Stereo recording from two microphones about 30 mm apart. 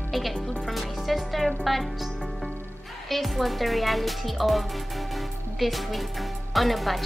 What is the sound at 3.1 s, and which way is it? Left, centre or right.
A woman's voice, centre.